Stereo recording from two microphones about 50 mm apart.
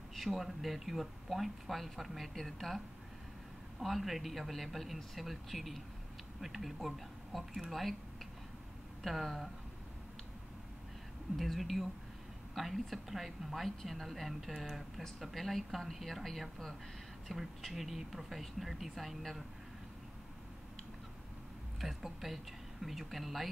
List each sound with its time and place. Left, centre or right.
0.1 s a woman's voice: centre
3.8 s a woman's voice: centre
9.0 s a woman's voice: centre
11.3 s a woman's voice: centre
21.8 s a woman's voice: centre